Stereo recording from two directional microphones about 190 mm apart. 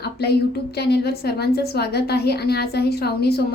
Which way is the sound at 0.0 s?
60° left (ahead or behind).